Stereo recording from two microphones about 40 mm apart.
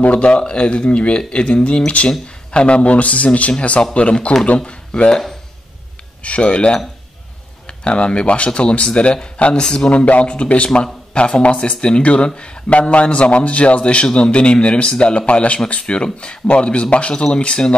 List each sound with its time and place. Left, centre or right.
0.0 s a man's voice: left
4.1 s a man's voice: left
6.2 s a man's voice: left
9.8 s a man's voice: left